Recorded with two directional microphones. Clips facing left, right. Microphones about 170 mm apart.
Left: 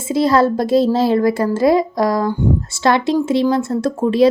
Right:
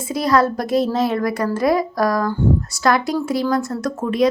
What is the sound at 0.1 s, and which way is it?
A woman's voice, 25° left (ahead or behind).